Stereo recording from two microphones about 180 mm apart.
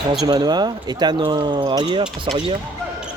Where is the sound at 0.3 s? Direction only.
25° right (ahead or behind).